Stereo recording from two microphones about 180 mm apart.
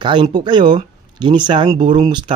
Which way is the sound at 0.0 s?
25° right (ahead or behind).